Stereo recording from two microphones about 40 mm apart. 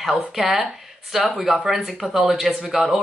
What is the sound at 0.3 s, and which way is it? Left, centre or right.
Speech, centre.